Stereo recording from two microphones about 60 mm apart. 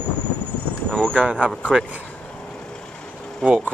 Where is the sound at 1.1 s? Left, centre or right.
Right.